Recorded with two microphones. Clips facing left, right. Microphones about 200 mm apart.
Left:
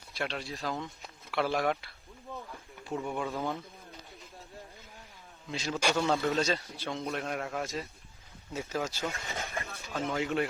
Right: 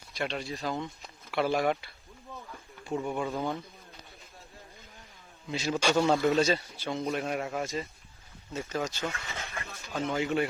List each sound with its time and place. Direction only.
0.1 s a man's voice: centre (ahead or behind)
2.9 s a man's voice: centre (ahead or behind)
5.5 s a man's voice: 5° right (ahead or behind)
6.0 s a man's voice: 15° right (ahead or behind); by 9.0 s 5° left (ahead or behind)
9.1 s vehicle: 15° left (ahead or behind)
9.6 s speech: centre (ahead or behind)